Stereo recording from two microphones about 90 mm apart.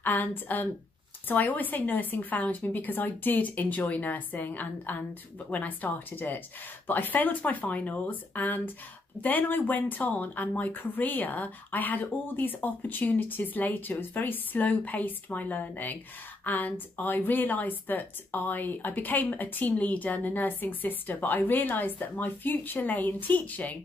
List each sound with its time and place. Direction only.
0.0 s a woman's voice: 20° left (ahead or behind)